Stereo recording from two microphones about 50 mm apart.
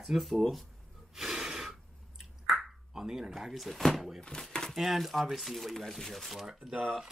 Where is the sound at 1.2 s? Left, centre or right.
Centre.